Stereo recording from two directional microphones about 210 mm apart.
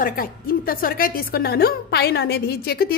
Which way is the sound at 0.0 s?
40° left (ahead or behind).